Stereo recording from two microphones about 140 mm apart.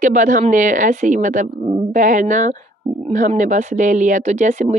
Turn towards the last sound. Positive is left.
turn(degrees=-60)  # may be behind; listen again after turning